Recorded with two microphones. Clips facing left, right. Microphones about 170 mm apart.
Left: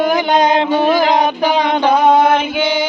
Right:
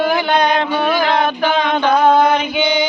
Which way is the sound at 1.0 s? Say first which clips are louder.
Left 2 dB; 15° left (ahead or behind).